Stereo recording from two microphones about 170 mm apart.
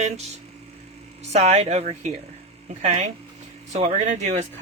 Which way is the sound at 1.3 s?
35° right (ahead or behind).